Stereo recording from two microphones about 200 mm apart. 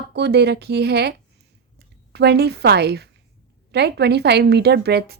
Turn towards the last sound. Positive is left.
turn(degrees=-55)  # may be behind; listen again after turning